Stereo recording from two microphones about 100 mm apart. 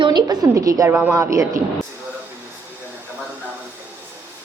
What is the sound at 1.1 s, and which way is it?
Speech, 30° right (ahead or behind).